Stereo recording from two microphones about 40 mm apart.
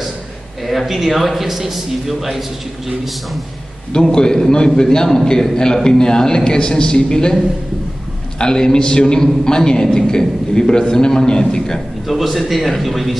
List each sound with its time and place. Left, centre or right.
0.7 s a man's voice: centre
3.9 s a man's voice: centre
8.4 s a man's voice: centre
12.1 s a man's voice: centre